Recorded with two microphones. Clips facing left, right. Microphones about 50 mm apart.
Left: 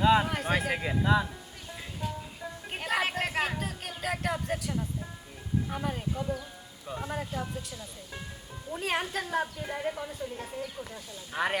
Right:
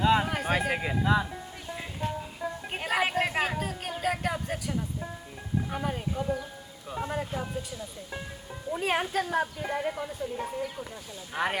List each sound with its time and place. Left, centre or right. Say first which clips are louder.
0.0 s speech: even; centre
2.0 s speech: right 3 dB; right
2.4 s a woman's voice: right 4 dB; centre
11.3 s speech: right 1 dB; centre